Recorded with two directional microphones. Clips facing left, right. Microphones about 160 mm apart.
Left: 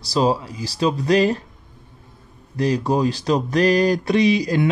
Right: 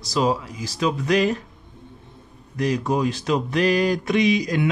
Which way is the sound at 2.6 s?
35° left (ahead or behind).